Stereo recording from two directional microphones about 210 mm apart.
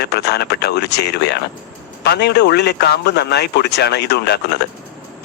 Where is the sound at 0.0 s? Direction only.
50° left (ahead or behind).